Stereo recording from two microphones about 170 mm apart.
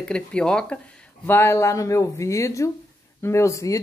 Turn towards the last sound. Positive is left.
turn(degrees=20)  # may be behind; listen again after turning